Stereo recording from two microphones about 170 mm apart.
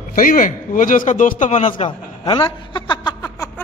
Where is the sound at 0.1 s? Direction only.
55° left (ahead or behind).